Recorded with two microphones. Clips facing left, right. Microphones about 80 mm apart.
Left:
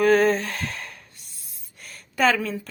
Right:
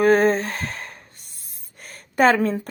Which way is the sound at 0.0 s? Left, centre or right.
Right.